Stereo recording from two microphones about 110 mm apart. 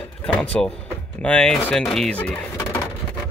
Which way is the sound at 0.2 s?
10° left (ahead or behind).